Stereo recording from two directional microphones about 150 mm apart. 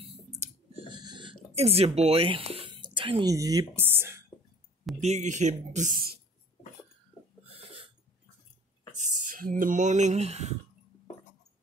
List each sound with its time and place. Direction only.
0.0 s clicking: 40° right (ahead or behind); by 4.2 s 15° right (ahead or behind)
5.0 s speech: 50° right (ahead or behind); by 6.1 s 70° right (ahead or behind)
7.4 s a sound: 40° right (ahead or behind)
8.9 s speech: 55° right (ahead or behind)